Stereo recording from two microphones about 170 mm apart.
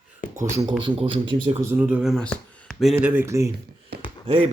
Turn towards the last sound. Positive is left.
turn(degrees=-35)  # may be behind; listen again after turning